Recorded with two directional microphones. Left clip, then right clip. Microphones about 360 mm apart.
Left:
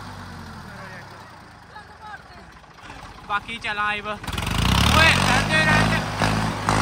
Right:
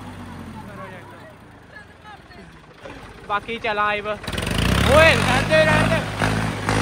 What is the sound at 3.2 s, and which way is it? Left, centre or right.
Vehicle, centre.